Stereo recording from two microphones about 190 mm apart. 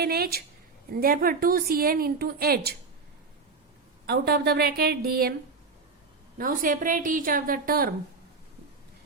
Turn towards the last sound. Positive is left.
turn(degrees=-50)  # may be behind; listen again after turning